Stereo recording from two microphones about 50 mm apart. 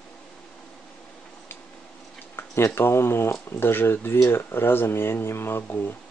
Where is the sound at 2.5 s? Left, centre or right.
Left.